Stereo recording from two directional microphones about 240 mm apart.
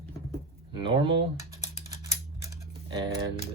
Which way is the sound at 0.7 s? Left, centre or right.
Centre.